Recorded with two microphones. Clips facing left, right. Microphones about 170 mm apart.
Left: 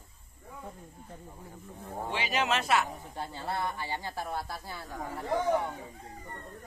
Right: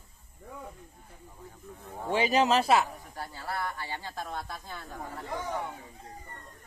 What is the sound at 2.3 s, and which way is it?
Speech, 35° right (ahead or behind).